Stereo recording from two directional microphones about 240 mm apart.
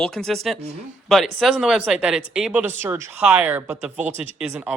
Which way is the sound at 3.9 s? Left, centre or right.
Right.